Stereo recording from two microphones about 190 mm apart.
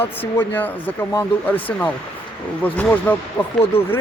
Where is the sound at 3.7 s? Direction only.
30° left (ahead or behind).